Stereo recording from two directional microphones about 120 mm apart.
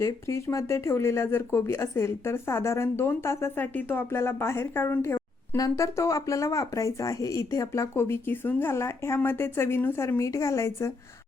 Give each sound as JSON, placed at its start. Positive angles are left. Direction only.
{"t": 0.0, "sound": "speech", "side_deg": 25}